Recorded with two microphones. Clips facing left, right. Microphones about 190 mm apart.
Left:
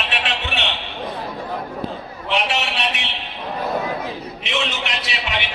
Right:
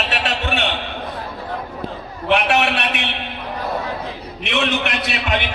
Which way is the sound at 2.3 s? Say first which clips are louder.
Right 6 dB; 60° right (ahead or behind).